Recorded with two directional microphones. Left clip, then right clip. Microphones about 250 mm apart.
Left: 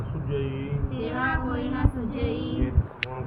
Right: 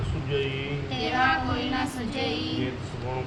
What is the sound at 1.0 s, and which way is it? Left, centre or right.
Female singing, centre.